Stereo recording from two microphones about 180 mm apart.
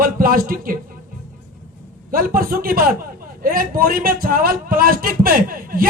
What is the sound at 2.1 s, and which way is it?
A man's voice, 55° right (ahead or behind).